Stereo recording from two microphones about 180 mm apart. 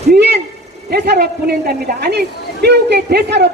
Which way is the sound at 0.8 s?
65° right (ahead or behind).